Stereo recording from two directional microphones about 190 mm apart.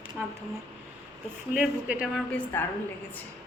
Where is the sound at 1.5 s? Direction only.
5° right (ahead or behind).